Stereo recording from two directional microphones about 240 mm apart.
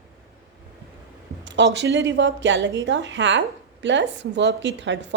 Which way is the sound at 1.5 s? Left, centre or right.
Right.